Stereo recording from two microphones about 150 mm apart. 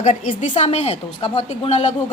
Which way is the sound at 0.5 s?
45° left (ahead or behind).